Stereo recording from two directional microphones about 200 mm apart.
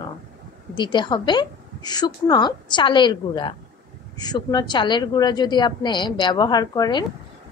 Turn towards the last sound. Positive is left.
turn(degrees=20)  # may be behind; listen again after turning